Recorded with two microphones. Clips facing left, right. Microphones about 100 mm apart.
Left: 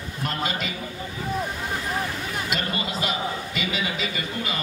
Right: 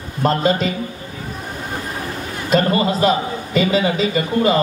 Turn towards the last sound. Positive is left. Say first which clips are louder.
# right 13 dB
turn(degrees=-40)  # may be behind; listen again after turning